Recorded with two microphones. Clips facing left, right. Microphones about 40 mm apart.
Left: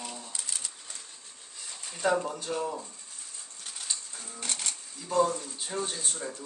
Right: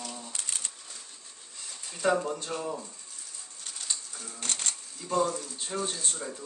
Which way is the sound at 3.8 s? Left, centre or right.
Centre.